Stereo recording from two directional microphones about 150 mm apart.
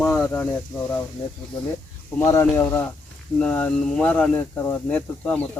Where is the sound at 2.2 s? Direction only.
20° left (ahead or behind).